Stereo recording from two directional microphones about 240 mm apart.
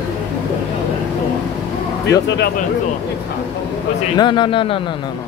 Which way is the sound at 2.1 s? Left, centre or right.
Left.